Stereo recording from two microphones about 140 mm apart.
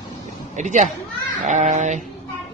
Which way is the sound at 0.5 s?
60° right (ahead or behind).